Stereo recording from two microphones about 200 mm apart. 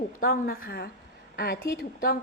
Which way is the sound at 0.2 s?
45° left (ahead or behind).